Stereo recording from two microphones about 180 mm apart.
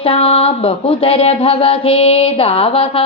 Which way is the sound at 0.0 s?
35° left (ahead or behind).